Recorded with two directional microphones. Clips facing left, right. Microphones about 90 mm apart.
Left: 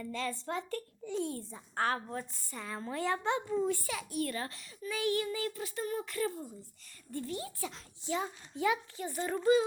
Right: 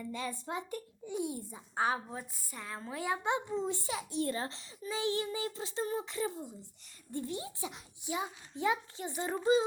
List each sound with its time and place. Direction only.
0.0 s speech: 15° right (ahead or behind)